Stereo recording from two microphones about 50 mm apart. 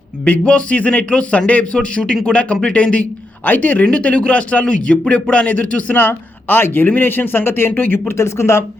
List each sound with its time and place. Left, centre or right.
0.3 s speech: left
3.4 s speech: left
6.0 s speech: left
8.1 s speech: left